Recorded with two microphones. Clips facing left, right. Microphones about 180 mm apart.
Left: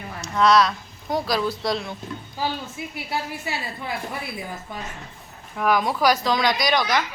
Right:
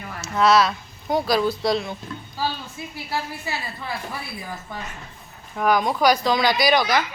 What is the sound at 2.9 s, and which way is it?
A woman's voice, 20° left (ahead or behind).